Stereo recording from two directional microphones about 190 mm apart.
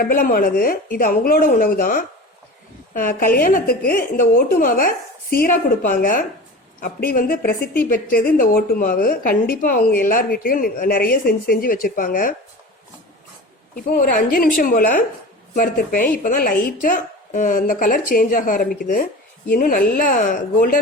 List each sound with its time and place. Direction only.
0.0 s a woman's voice: 45° left (ahead or behind)
13.7 s a woman's voice: 45° left (ahead or behind)